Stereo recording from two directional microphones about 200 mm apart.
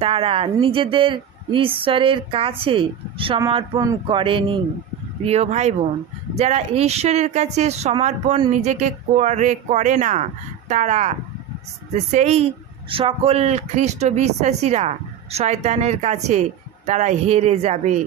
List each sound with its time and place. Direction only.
0.0 s a woman's voice: 30° right (ahead or behind)